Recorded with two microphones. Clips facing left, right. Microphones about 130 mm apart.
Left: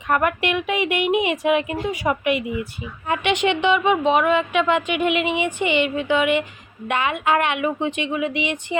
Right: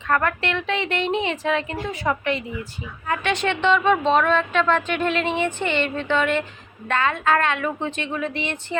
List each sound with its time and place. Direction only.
0.1 s a woman's voice: 15° left (ahead or behind)